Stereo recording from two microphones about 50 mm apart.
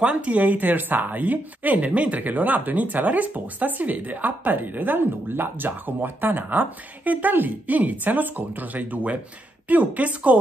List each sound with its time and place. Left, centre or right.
0.0 s speech: right